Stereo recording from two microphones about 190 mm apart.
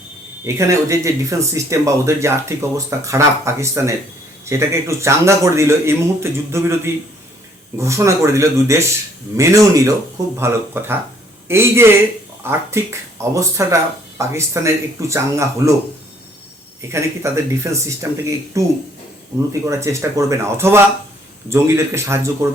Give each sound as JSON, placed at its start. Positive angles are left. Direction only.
{"t": 0.4, "sound": "speech", "side_deg": -15}
{"t": 16.9, "sound": "speech", "side_deg": -15}
{"t": 19.6, "sound": "speech", "side_deg": -15}